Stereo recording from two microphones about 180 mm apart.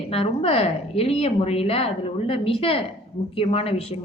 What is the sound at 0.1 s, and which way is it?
A woman's voice, 35° left (ahead or behind).